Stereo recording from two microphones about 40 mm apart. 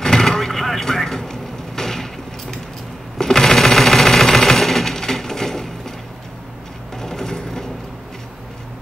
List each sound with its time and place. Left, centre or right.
0.0 s vehicle: centre
3.2 s sewing machine: centre
7.0 s a sound: centre